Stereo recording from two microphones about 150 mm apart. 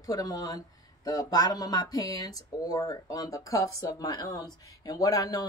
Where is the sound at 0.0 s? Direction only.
25° left (ahead or behind).